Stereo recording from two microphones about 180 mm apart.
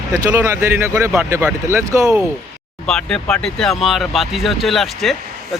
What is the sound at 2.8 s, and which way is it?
Speech, 5° left (ahead or behind).